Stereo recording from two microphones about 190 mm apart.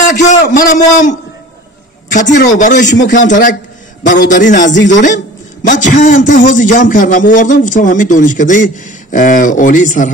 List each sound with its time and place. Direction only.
0.2 s a man's voice: 40° left (ahead or behind)
2.1 s a man's voice: 40° left (ahead or behind)
4.0 s a man's voice: 75° left (ahead or behind)
4.3 s a man's voice: 40° left (ahead or behind)